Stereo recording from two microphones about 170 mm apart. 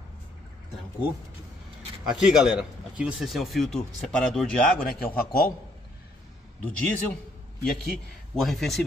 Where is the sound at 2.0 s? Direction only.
5° right (ahead or behind).